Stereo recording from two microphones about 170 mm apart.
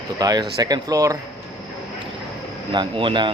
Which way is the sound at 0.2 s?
20° right (ahead or behind).